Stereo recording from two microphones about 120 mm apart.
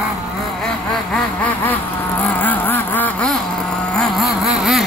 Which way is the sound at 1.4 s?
15° left (ahead or behind).